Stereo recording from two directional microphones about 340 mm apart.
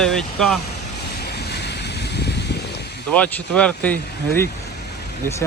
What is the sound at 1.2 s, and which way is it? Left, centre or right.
Boat, left.